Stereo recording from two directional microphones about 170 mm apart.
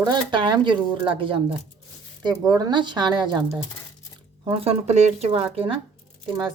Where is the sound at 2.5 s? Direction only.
25° right (ahead or behind).